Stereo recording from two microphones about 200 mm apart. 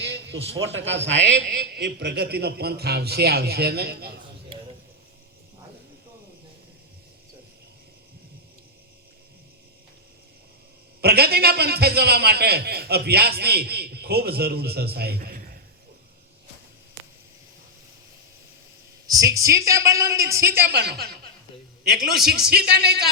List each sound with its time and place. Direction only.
0.0 s a man's voice: 60° right (ahead or behind)
11.0 s a man's voice: 50° right (ahead or behind)
19.0 s a man's voice: 15° right (ahead or behind)
20.6 s a woman's voice: 55° right (ahead or behind)